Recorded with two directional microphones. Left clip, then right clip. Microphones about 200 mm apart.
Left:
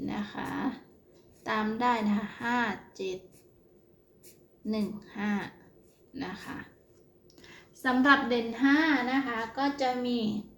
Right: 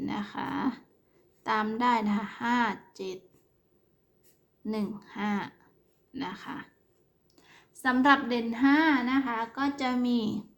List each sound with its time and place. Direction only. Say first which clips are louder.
0.0 s a sound: right 2 dB; 25° right (ahead or behind)
1.5 s a woman's voice: right 2 dB; 25° right (ahead or behind)
4.6 s a woman's voice: even; 25° right (ahead or behind)
7.3 s a woman's voice: left 4 dB; 10° right (ahead or behind)
8.7 s a child's voice: right 1 dB; 30° right (ahead or behind)